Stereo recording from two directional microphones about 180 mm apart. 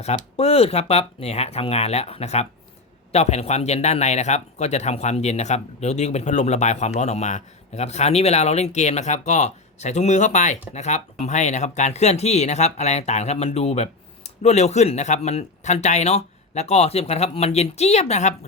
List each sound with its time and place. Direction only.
0.3 s a man's voice: 35° left (ahead or behind)